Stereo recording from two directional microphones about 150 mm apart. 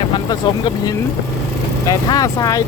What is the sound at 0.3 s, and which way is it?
Speech, 25° left (ahead or behind).